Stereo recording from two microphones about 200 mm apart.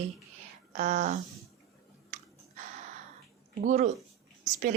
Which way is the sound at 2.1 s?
35° right (ahead or behind).